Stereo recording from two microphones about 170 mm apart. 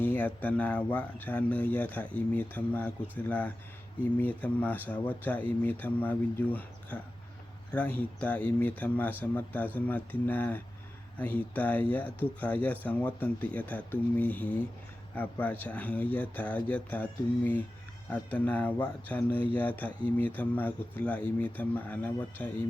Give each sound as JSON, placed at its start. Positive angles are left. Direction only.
{"t": 0.0, "sound": "speech", "side_deg": 10}